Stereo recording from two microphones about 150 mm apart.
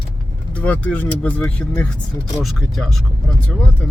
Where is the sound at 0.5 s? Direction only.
10° left (ahead or behind).